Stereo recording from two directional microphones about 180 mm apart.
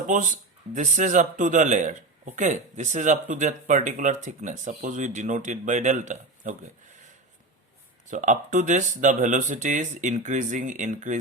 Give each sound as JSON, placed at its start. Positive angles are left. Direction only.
{"t": 0.1, "sound": "speech", "side_deg": -45}
{"t": 8.0, "sound": "speech", "side_deg": -45}